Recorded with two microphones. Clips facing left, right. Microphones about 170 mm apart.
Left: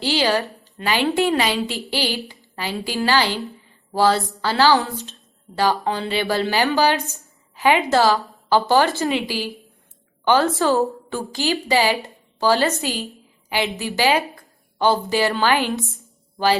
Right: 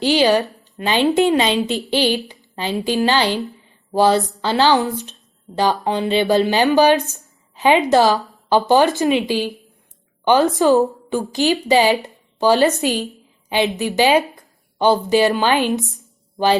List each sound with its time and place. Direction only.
0.0 s speech: 20° right (ahead or behind)